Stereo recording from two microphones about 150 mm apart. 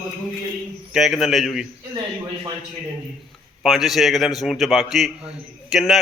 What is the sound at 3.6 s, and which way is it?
A man's voice, centre (ahead or behind).